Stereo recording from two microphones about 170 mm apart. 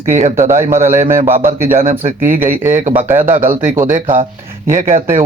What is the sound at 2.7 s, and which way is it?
Speech, 50° right (ahead or behind).